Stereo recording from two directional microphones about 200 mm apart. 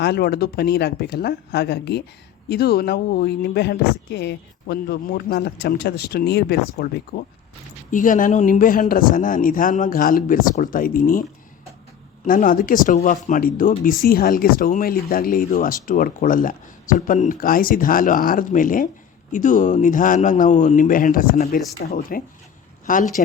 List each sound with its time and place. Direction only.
0.0 s speech: 55° left (ahead or behind)
12.2 s speech: 45° left (ahead or behind)